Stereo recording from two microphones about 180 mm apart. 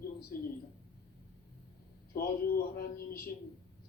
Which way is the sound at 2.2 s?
55° left (ahead or behind).